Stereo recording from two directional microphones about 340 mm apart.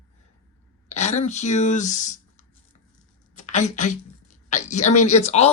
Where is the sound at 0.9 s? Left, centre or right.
Centre.